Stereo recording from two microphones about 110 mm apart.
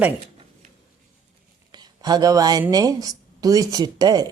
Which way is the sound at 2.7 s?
35° right (ahead or behind).